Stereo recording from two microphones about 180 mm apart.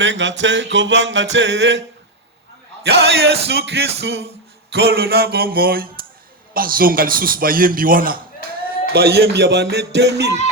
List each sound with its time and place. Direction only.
0.0 s music: 85° right
2.8 s a sound: 65° right (ahead or behind)
6.5 s a man's voice: 55° right (ahead or behind)
8.9 s music: 60° right (ahead or behind)